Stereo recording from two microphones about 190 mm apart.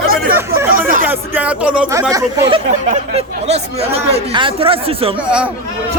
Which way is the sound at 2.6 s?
35° right (ahead or behind).